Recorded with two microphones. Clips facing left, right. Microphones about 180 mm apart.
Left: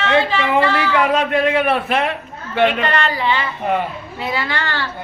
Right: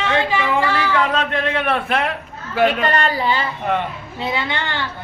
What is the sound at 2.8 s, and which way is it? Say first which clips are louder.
Speech: even; 40° right (ahead or behind).